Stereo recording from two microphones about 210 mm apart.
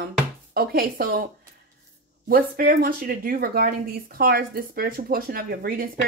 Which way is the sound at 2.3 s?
45° right (ahead or behind).